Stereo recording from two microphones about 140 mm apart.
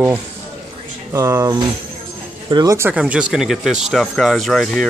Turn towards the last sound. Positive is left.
turn(degrees=5)  # may be behind; listen again after turning